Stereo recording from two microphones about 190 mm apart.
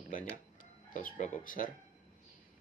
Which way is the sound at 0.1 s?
45° left (ahead or behind).